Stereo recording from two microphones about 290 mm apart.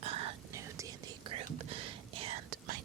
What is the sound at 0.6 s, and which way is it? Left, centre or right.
Whispering, centre.